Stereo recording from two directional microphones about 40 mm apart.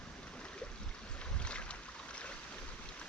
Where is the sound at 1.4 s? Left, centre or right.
Left.